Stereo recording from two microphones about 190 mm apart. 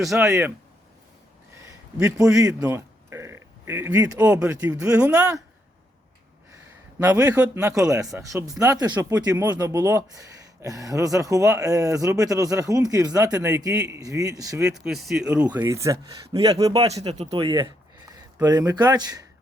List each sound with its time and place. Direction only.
0.1 s speech: 15° right (ahead or behind)
1.5 s a sound: 15° right (ahead or behind)
2.6 s speech: 10° right (ahead or behind)
7.3 s speech: 5° right (ahead or behind)
14.8 s speech: centre (ahead or behind); by 16.8 s 20° right (ahead or behind)
16.8 s speech: 35° right (ahead or behind)